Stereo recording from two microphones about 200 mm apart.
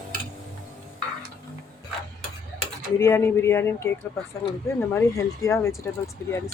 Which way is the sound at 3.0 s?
15° left (ahead or behind).